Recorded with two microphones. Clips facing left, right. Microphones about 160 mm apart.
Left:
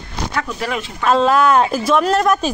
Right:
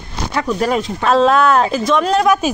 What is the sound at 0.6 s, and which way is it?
Speech, 40° right (ahead or behind).